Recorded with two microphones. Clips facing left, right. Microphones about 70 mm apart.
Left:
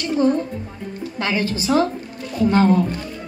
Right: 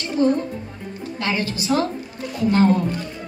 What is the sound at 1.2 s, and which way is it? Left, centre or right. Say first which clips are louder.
Speech: left 2 dB; left.